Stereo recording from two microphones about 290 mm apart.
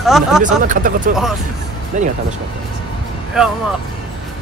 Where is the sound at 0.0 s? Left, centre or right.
Centre.